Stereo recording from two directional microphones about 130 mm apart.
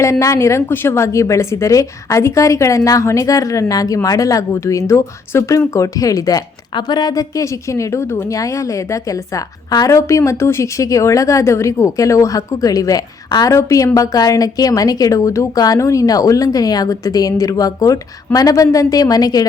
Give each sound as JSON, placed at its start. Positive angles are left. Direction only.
{"t": 0.0, "sound": "speech", "side_deg": 25}
{"t": 9.7, "sound": "speech", "side_deg": 25}